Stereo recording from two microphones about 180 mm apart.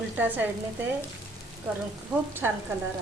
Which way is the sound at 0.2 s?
10° right (ahead or behind).